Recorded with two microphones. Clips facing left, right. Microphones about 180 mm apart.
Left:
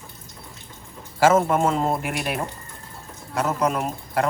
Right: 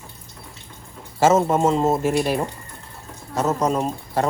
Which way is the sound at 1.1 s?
25° right (ahead or behind).